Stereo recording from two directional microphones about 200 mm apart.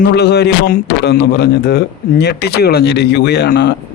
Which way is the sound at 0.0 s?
55° left (ahead or behind).